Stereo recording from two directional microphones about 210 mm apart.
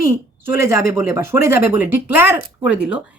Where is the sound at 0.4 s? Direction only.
10° right (ahead or behind).